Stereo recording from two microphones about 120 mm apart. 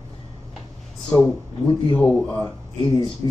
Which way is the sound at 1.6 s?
45° left (ahead or behind).